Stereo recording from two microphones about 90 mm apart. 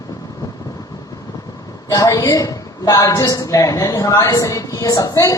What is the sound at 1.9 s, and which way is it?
A woman's voice, 40° left (ahead or behind).